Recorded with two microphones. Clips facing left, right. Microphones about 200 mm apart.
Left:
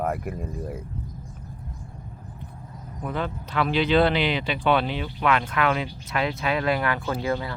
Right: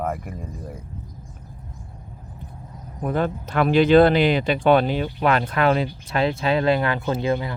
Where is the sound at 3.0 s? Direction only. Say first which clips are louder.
Right 6 dB; 45° right (ahead or behind); by 7.6 s 20° right (ahead or behind).